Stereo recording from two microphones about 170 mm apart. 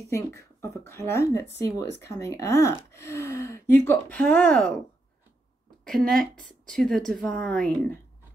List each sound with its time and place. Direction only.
0.1 s speech: 15° left (ahead or behind)
5.9 s a woman's voice: 5° left (ahead or behind)